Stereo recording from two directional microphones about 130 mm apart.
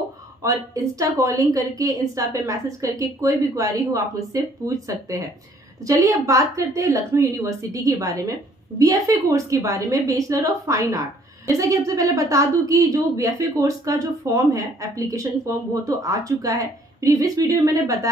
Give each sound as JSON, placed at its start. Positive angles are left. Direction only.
{"t": 0.4, "sound": "a woman's voice", "side_deg": -25}